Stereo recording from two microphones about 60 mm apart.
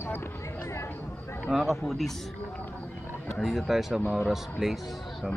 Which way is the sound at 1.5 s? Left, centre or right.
Centre.